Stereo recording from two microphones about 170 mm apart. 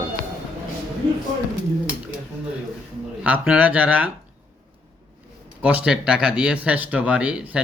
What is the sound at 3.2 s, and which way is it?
Speech, 10° right (ahead or behind).